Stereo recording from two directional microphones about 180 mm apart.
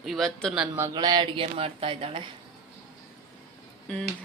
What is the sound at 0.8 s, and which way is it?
Speech, 20° right (ahead or behind).